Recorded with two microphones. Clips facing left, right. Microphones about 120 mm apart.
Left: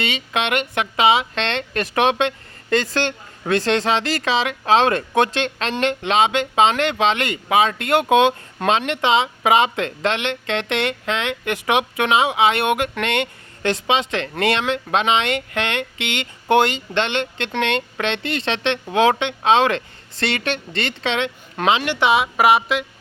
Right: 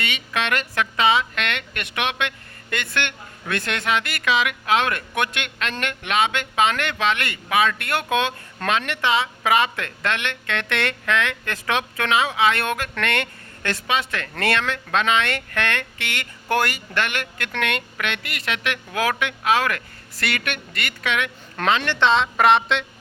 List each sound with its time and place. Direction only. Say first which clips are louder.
0.0 s speech: left 3 dB; 25° left (ahead or behind)
21.5 s a woman's voice: left 2 dB; 15° left (ahead or behind)